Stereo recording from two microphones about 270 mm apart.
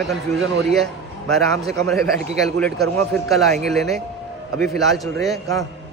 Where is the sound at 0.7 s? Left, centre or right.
Centre.